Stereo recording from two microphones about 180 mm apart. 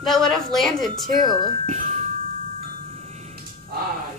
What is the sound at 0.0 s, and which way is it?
Speech, centre (ahead or behind).